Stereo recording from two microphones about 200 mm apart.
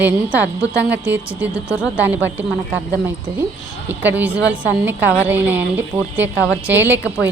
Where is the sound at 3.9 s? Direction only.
10° right (ahead or behind).